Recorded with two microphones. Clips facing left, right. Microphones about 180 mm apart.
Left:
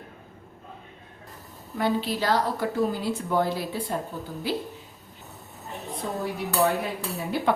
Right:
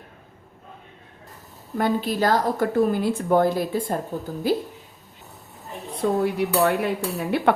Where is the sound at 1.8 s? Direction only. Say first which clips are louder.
Right 4 dB; 45° right (ahead or behind).